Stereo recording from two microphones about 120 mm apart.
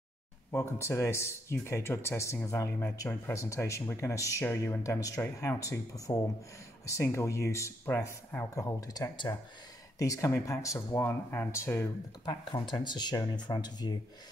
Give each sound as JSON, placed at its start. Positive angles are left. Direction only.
{"t": 0.5, "sound": "speech", "side_deg": 20}
{"t": 12.3, "sound": "speech", "side_deg": 35}